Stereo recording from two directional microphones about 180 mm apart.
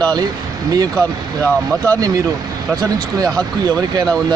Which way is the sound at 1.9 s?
20° right (ahead or behind).